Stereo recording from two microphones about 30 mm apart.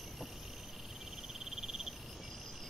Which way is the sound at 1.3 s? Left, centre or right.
Centre.